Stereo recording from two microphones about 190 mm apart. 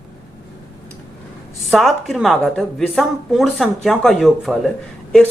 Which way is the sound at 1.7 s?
Centre (ahead or behind).